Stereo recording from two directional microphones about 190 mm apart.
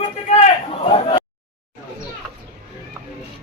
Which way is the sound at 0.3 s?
30° left (ahead or behind).